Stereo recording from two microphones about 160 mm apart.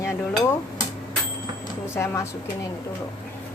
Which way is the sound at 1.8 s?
15° left (ahead or behind).